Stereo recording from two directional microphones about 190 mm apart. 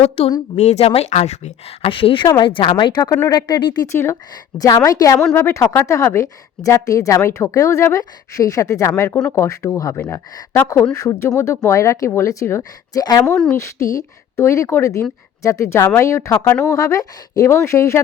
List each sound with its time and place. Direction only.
0.0 s a woman's voice: 25° left (ahead or behind)